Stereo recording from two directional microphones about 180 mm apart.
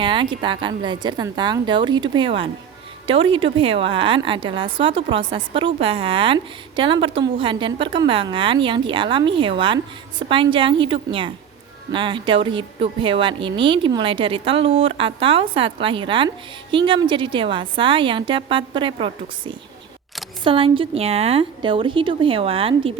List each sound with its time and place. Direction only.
0.0 s a woman's voice: 25° right (ahead or behind)